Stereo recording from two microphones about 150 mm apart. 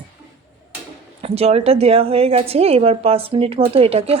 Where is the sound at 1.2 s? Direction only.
40° right (ahead or behind).